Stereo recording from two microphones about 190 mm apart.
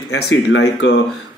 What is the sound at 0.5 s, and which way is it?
Speech, 65° left (ahead or behind).